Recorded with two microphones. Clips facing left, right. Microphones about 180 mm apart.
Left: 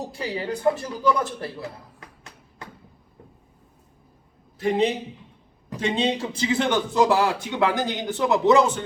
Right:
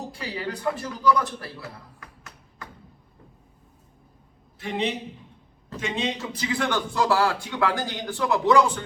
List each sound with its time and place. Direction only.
0.2 s speech: 25° left (ahead or behind)
2.0 s a sound: 30° left (ahead or behind)
4.6 s a man's voice: 40° left (ahead or behind); by 8.8 s 20° left (ahead or behind)